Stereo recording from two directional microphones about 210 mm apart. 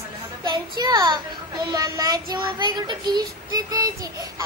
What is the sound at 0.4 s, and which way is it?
A child's voice, 20° right (ahead or behind).